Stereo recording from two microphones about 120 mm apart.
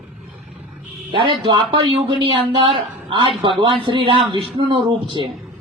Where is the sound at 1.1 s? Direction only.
45° right (ahead or behind).